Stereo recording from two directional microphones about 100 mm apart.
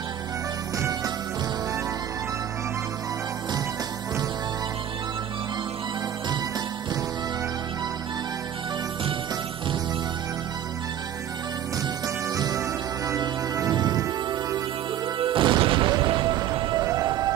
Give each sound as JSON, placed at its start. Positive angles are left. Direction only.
{"t": 12.4, "sound": "music", "side_deg": -40}
{"t": 15.1, "sound": "music", "side_deg": -60}
{"t": 16.8, "sound": "music", "side_deg": -40}